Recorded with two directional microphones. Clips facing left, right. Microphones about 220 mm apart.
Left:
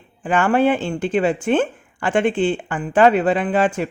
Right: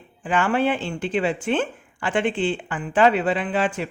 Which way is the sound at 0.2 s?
50° left (ahead or behind).